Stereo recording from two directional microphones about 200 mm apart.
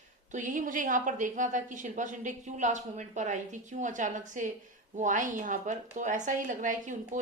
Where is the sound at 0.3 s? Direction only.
40° right (ahead or behind).